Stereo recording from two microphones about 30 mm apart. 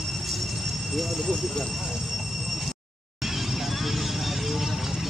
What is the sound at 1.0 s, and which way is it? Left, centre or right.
Speech, centre.